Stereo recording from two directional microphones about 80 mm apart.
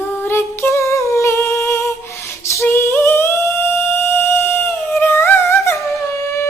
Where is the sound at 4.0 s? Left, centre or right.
Left.